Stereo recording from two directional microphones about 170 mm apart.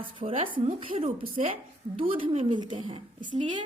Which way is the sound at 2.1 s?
35° right (ahead or behind).